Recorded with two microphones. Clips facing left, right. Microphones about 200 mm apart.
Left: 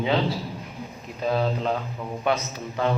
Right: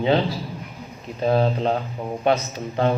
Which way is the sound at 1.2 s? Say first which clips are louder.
Right 4 dB; 30° right (ahead or behind).